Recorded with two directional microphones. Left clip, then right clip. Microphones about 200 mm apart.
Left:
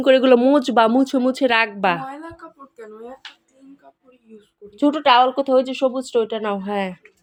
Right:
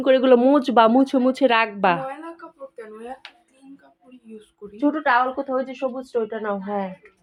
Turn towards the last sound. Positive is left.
turn(degrees=15)  # may be behind; listen again after turning